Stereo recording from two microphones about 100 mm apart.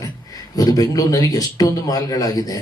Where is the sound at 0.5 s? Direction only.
40° left (ahead or behind).